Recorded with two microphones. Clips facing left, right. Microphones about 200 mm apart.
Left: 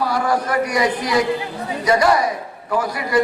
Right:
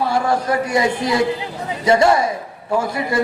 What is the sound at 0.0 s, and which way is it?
A man's voice, 25° right (ahead or behind).